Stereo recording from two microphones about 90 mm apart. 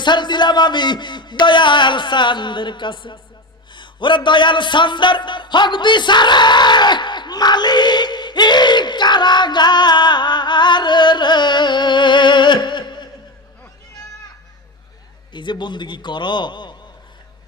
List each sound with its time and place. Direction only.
0.0 s music: 55° left (ahead or behind)
15.3 s music: 60° left (ahead or behind)